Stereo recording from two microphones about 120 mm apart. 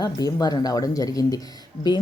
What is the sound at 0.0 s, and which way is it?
Speech, 35° left (ahead or behind).